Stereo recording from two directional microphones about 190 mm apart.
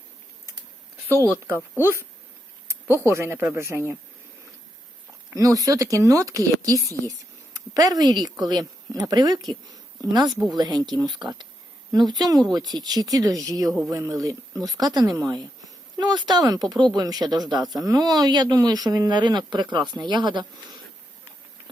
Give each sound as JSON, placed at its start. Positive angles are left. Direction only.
{"t": 1.0, "sound": "speech", "side_deg": -15}
{"t": 2.8, "sound": "speech", "side_deg": 15}
{"t": 3.1, "sound": "speech", "side_deg": -15}
{"t": 5.3, "sound": "a woman's voice", "side_deg": -20}
{"t": 10.2, "sound": "speech", "side_deg": 0}
{"t": 10.5, "sound": "speech", "side_deg": -20}
{"t": 13.7, "sound": "speech", "side_deg": 0}
{"t": 13.9, "sound": "speech", "side_deg": -20}